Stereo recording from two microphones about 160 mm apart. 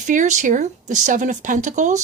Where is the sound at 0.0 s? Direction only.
50° right (ahead or behind).